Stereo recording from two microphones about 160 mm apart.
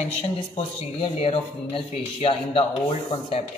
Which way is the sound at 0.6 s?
40° left (ahead or behind).